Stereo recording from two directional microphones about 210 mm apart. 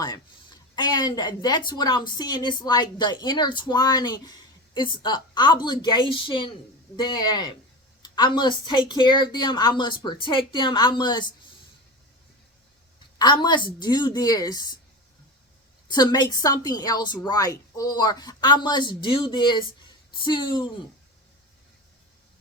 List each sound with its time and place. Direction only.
0.0 s speech: 20° left (ahead or behind)
13.1 s speech: 20° left (ahead or behind)
15.9 s speech: 20° left (ahead or behind)